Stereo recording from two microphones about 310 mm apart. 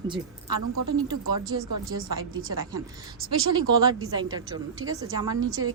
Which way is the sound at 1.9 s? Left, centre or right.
Right.